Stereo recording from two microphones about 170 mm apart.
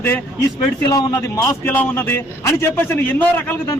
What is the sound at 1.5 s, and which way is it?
A man's voice, 10° left (ahead or behind).